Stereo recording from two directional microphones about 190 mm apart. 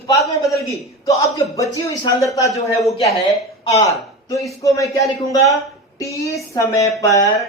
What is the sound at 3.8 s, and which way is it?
Speech, 15° left (ahead or behind).